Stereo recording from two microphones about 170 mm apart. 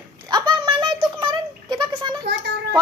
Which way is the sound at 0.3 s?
25° right (ahead or behind).